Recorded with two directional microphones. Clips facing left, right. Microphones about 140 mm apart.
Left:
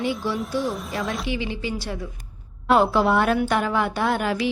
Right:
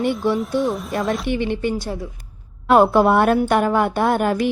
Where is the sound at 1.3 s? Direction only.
55° right (ahead or behind).